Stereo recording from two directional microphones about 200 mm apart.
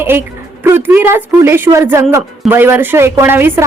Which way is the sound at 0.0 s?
10° right (ahead or behind).